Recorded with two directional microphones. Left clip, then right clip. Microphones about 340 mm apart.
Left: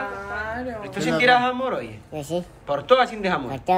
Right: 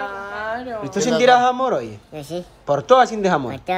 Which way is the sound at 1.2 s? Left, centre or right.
Centre.